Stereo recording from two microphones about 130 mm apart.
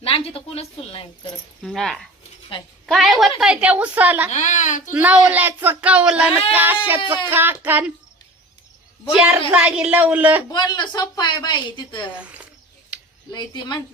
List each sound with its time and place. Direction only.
0.0 s speech: 45° left (ahead or behind)
1.6 s a woman's voice: centre (ahead or behind)
4.3 s speech: 70° left (ahead or behind)
4.9 s a woman's voice: 10° right (ahead or behind)
9.1 s a woman's voice: 10° right (ahead or behind)
10.5 s speech: 35° left (ahead or behind)
12.2 s speech: 10° right (ahead or behind)
13.3 s speech: 35° left (ahead or behind)